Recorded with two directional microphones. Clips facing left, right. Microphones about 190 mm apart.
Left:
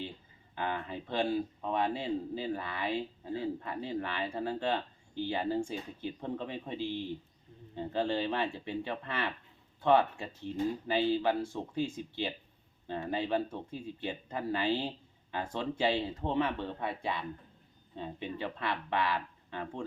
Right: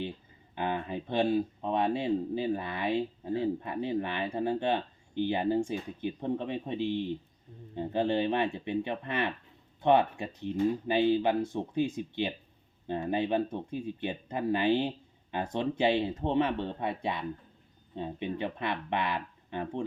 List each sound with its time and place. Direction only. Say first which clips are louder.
0.5 s speech: right 4 dB; 20° right (ahead or behind)